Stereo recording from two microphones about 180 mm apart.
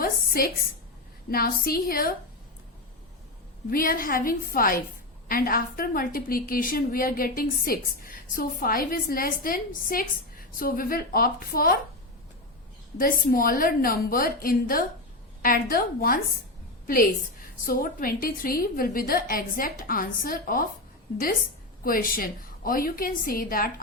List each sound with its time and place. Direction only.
0.0 s a sound: 55° left (ahead or behind)
1.3 s a woman's voice: 55° left (ahead or behind)
3.7 s a woman's voice: 55° left (ahead or behind)
13.0 s a woman's voice: 50° left (ahead or behind)
21.8 s a woman's voice: 50° left (ahead or behind)